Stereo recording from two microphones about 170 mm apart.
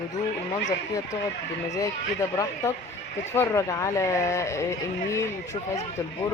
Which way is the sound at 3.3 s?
15° left (ahead or behind).